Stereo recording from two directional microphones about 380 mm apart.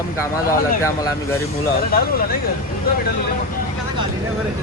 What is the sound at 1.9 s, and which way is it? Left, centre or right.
Speech, left.